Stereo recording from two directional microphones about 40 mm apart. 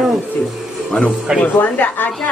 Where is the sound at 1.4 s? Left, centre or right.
Left.